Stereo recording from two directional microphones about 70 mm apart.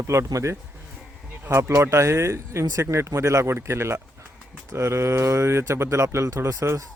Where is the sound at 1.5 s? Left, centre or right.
Right.